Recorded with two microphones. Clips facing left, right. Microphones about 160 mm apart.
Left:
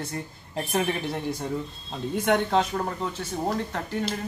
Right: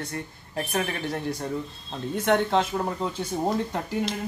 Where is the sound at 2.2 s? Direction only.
Centre (ahead or behind).